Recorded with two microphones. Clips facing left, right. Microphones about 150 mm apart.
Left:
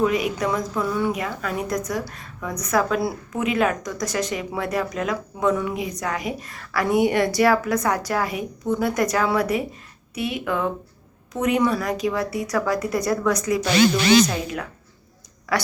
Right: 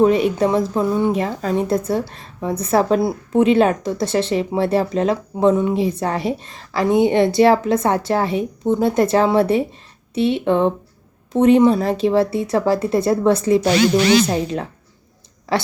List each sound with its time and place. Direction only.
0.0 s a woman's voice: 30° right (ahead or behind)